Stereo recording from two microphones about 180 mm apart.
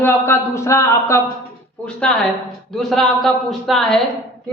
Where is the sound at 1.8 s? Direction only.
5° left (ahead or behind).